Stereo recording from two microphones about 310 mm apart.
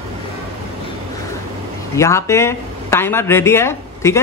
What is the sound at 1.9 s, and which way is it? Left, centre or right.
A man's voice, centre.